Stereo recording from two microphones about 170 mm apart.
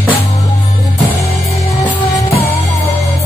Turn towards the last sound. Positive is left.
turn(degrees=25)  # may be behind; listen again after turning